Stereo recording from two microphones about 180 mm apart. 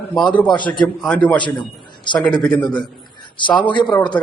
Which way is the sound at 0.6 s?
25° left (ahead or behind).